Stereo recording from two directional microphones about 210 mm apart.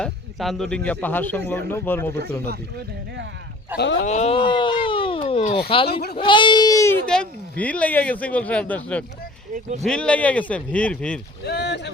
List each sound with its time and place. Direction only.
0.0 s speech: centre (ahead or behind)
2.4 s speech: 50° right (ahead or behind)
3.7 s speech: 10° right (ahead or behind)
4.0 s speech: 35° left (ahead or behind)
5.9 s speech: 50° left (ahead or behind)
6.1 s speech: 25° left (ahead or behind); by 9.0 s 5° left (ahead or behind)
9.5 s speech: 35° right (ahead or behind)
9.8 s speech: 5° left (ahead or behind)
11.4 s speech: 55° left (ahead or behind)